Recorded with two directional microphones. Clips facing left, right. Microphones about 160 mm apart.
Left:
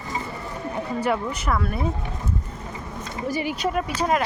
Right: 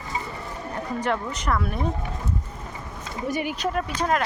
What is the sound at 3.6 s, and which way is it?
Speech, 5° left (ahead or behind).